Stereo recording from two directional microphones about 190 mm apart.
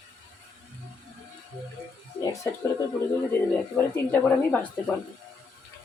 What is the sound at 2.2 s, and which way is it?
Speech, 15° left (ahead or behind).